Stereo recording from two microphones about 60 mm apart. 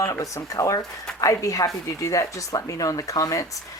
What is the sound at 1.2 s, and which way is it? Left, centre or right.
A woman's voice, left.